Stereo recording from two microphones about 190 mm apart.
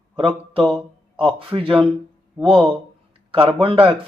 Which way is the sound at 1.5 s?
25° right (ahead or behind).